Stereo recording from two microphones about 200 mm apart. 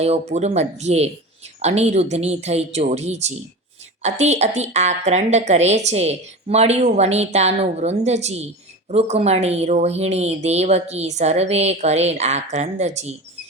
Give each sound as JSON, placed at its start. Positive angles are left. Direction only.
{"t": 0.0, "sound": "a woman's voice", "side_deg": -35}